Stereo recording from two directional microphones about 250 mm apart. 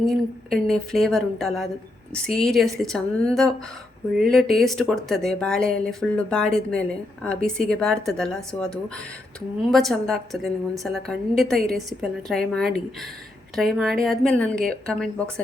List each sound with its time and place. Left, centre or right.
0.0 s a woman's voice: centre